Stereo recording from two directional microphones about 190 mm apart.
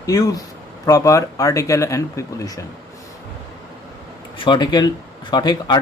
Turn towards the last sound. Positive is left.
turn(degrees=20)  # may be behind; listen again after turning